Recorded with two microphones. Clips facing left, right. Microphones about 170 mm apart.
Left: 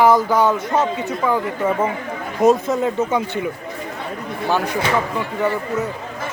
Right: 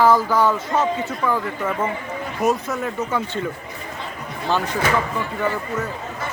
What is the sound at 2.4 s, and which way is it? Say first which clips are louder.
Speech: left 6 dB; 20° left (ahead or behind).